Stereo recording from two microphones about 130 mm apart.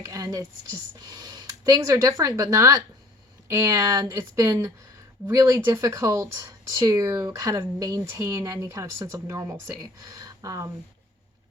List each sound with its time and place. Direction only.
0.0 s speech: 25° right (ahead or behind)